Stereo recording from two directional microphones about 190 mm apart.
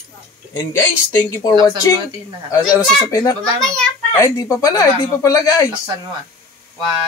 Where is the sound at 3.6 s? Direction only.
5° left (ahead or behind).